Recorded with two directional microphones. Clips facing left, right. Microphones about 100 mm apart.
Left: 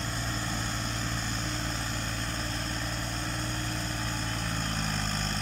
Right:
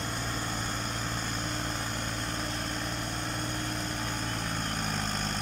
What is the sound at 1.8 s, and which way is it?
Vehicle, 10° right (ahead or behind).